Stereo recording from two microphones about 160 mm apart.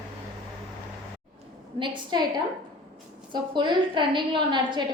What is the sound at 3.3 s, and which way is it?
A woman's voice, 30° right (ahead or behind).